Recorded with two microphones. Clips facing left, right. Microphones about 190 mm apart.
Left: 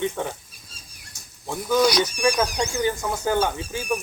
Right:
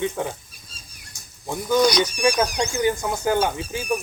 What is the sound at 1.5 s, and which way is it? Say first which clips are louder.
Speech: right 1 dB; 5° left (ahead or behind).